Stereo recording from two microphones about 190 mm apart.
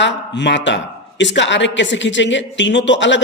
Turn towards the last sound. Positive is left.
turn(degrees=70)  # may be behind; listen again after turning